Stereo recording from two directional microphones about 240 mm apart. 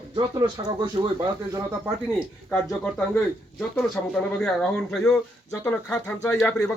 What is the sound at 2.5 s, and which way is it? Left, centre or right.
Speech, centre.